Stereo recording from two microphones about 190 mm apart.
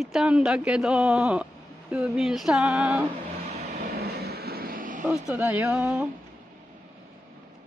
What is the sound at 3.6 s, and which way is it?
Vehicle, 55° right (ahead or behind).